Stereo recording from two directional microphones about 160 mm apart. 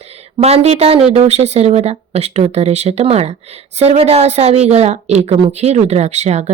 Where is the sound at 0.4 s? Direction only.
40° right (ahead or behind).